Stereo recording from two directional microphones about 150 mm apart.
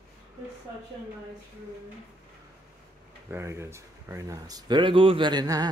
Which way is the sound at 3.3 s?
15° right (ahead or behind).